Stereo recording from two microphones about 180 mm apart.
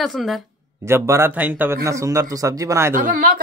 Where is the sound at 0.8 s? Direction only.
15° right (ahead or behind).